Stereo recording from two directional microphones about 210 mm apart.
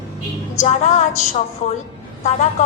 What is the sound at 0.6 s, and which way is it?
A woman's voice, 35° left (ahead or behind).